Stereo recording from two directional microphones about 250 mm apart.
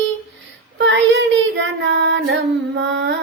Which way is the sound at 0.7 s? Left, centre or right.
Right.